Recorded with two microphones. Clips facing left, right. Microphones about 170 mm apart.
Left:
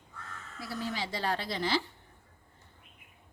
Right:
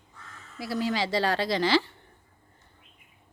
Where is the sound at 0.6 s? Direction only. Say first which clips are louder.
Right 8 dB; 90° right.